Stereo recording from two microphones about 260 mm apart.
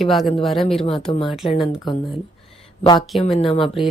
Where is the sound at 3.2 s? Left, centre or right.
Left.